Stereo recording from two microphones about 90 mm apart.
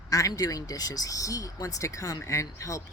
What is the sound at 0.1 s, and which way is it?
A man's voice, 40° left (ahead or behind).